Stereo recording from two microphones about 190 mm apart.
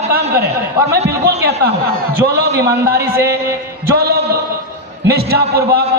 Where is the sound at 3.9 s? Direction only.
55° right (ahead or behind).